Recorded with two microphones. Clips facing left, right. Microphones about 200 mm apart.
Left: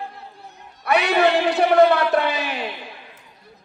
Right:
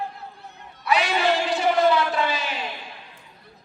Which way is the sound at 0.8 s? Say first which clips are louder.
Left 4 dB; 60° left (ahead or behind).